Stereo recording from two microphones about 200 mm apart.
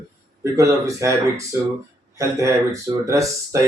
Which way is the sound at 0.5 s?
15° right (ahead or behind).